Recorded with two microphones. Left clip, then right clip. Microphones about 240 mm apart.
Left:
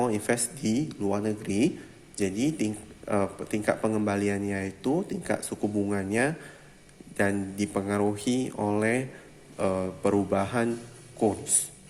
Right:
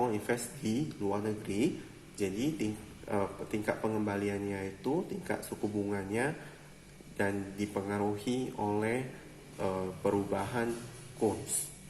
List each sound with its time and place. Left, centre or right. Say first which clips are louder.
0.0 s speech: left 5 dB; left